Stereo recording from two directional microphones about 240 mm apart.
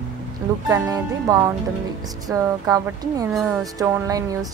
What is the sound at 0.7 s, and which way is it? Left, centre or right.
Speech, centre.